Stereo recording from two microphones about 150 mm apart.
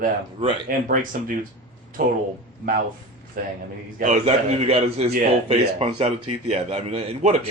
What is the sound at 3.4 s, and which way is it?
Speech, 65° right (ahead or behind).